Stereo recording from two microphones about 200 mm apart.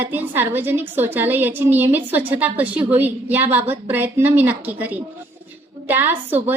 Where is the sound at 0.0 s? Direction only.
10° right (ahead or behind).